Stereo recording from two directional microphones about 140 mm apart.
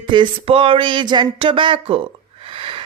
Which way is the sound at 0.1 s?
40° right (ahead or behind).